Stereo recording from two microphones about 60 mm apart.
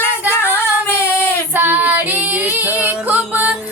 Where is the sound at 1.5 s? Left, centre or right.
Right.